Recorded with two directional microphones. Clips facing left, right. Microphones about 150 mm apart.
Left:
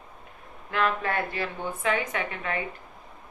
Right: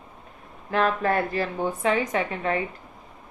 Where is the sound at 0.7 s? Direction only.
35° right (ahead or behind).